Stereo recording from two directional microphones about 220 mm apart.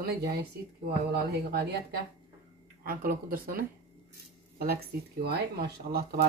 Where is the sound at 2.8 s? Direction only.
40° right (ahead or behind).